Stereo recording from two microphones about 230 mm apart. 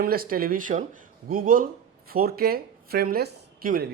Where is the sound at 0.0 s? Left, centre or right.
Right.